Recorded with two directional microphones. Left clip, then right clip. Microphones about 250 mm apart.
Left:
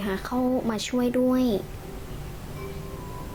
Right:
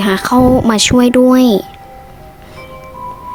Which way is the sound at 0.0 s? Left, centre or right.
Right.